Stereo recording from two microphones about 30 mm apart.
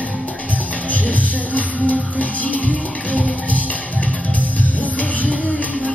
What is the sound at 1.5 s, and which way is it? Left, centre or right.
Music, left.